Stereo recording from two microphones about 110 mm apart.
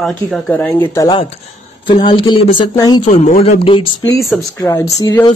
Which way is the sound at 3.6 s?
55° left (ahead or behind).